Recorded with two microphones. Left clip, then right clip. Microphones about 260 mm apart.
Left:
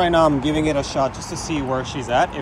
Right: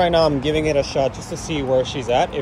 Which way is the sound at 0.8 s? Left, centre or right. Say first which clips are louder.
Right 2 dB; left.